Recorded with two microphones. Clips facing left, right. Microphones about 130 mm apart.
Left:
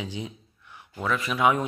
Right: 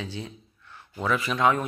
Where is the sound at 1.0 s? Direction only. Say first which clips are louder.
Right 1 dB; centre (ahead or behind).